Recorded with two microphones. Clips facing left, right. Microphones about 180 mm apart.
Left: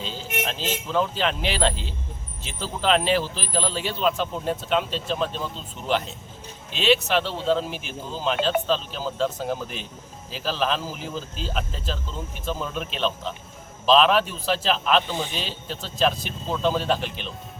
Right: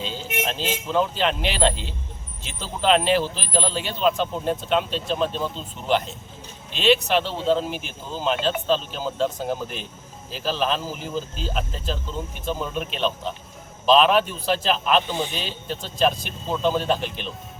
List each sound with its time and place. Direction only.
0.0 s music: centre (ahead or behind)
0.9 s a man's voice: centre (ahead or behind)